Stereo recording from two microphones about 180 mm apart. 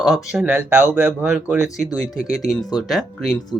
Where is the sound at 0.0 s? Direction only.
Centre (ahead or behind).